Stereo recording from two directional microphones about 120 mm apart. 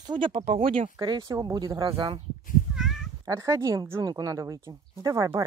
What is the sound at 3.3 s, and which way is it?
Speech, 25° right (ahead or behind).